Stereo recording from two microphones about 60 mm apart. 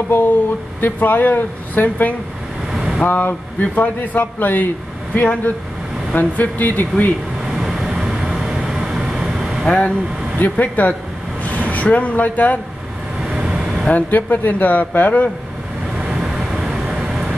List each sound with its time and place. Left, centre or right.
0.7 s a man's voice: left
2.7 s vehicle: centre
3.1 s a man's voice: left
7.4 s vehicle: centre
9.7 s speech: centre
10.4 s speech: left
13.2 s vehicle: centre
13.8 s speech: left
16.0 s vehicle: centre